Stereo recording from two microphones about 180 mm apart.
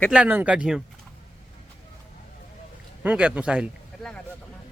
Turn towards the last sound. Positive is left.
turn(degrees=-5)  # may be behind; listen again after turning